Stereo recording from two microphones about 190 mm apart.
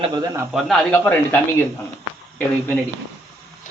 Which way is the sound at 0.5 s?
5° left (ahead or behind).